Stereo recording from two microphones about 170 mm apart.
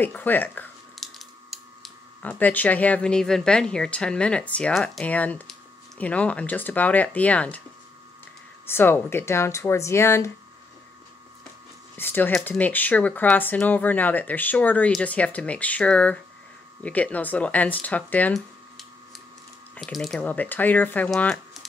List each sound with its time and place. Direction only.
0.0 s a woman's voice: 10° left (ahead or behind)
0.9 s a sound: centre (ahead or behind)
2.2 s a woman's voice: 10° left (ahead or behind)
8.6 s a woman's voice: 15° left (ahead or behind)
12.0 s a woman's voice: 10° left (ahead or behind)